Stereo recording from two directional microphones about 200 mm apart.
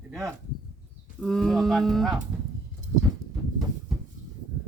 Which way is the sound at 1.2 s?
Centre (ahead or behind).